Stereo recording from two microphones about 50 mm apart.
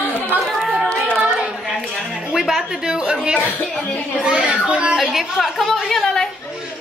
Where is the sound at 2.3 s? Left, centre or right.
Centre.